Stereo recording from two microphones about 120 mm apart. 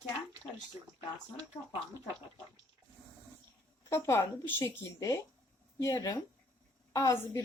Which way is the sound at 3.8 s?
25° left (ahead or behind).